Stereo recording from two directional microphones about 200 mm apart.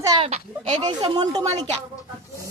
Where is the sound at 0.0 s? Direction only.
20° right (ahead or behind).